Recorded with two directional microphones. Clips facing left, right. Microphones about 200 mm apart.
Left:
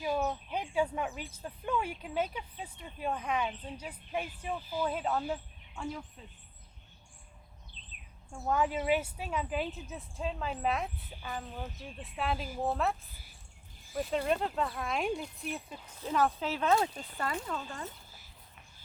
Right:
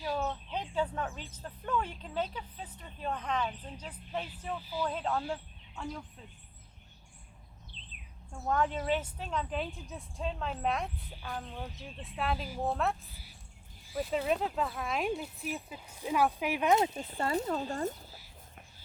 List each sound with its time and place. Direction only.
0.0 s speech: 15° left (ahead or behind)
7.7 s bird: 45° left (ahead or behind)
8.3 s speech: 5° left (ahead or behind); by 17.3 s 25° right (ahead or behind)
17.5 s speech: 40° right (ahead or behind)